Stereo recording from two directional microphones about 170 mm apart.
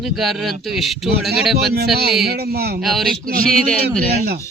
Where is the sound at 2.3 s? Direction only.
65° right (ahead or behind).